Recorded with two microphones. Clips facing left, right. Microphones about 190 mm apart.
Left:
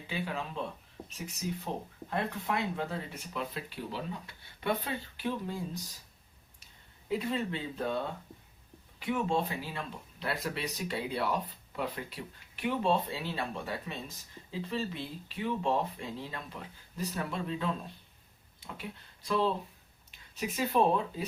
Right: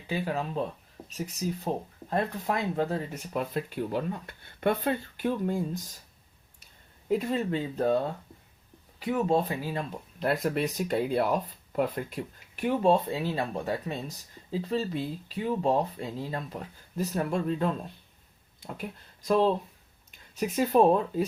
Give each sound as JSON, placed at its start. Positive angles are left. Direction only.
{"t": 0.1, "sound": "speech", "side_deg": -40}
{"t": 7.1, "sound": "speech", "side_deg": -45}
{"t": 20.1, "sound": "a sound", "side_deg": -45}
{"t": 20.6, "sound": "speech", "side_deg": -45}